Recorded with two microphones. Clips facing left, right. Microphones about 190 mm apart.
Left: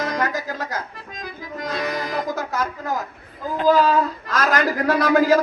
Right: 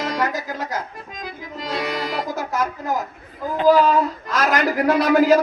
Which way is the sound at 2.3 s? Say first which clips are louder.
Right 1 dB; 20° right (ahead or behind).